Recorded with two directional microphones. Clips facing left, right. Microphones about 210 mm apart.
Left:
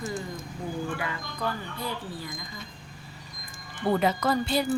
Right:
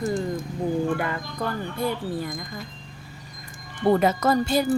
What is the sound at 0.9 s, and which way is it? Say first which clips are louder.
Speech: right 6 dB; 50° right (ahead or behind).